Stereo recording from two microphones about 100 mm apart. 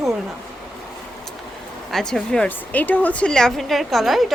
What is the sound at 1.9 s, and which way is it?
A woman's voice, 5° left (ahead or behind).